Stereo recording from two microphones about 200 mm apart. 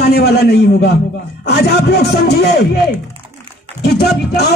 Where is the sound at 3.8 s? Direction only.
55° left (ahead or behind).